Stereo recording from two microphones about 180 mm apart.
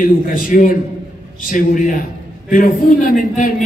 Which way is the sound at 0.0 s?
50° left (ahead or behind).